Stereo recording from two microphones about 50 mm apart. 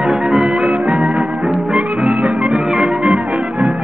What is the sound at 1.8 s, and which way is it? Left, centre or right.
Music, centre.